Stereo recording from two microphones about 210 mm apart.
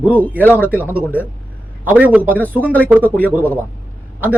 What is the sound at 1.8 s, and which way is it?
Speech, 5° right (ahead or behind).